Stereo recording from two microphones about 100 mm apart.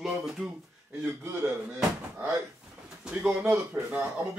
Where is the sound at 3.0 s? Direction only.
10° right (ahead or behind).